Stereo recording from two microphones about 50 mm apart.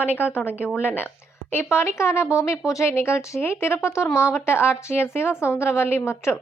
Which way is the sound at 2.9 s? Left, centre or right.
Left.